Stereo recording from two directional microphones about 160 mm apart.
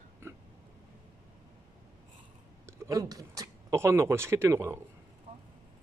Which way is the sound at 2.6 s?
20° right (ahead or behind).